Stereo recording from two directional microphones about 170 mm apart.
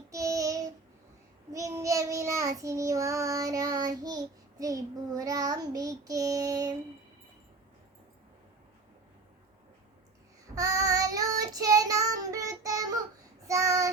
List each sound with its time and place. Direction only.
0.1 s child singing: 20° right (ahead or behind)
10.5 s child singing: 20° right (ahead or behind)